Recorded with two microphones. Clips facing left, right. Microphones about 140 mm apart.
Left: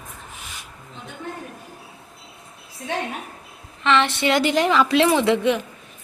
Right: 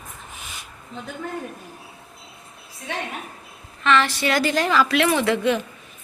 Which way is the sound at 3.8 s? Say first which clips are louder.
Left 1 dB; 25° left (ahead or behind).